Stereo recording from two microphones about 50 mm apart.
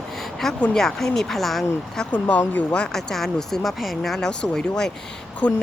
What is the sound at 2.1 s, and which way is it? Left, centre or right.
Speech, left.